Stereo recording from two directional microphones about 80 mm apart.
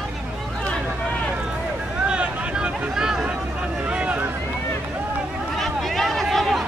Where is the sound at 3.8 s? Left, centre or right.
Centre.